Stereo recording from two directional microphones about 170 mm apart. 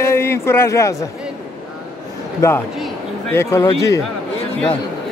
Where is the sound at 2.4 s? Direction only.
15° left (ahead or behind).